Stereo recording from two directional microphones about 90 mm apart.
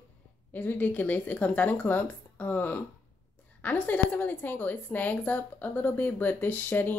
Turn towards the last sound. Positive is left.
turn(degrees=20)  # may be behind; listen again after turning